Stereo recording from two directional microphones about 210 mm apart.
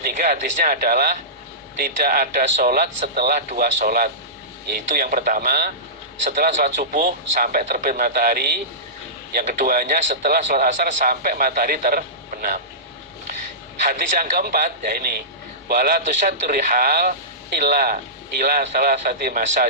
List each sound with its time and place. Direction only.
0.0 s a man's voice: 40° right (ahead or behind)
13.8 s a man's voice: 40° right (ahead or behind)